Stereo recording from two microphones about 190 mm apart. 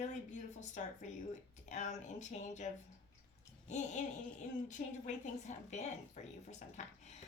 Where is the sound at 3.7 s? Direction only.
40° left (ahead or behind).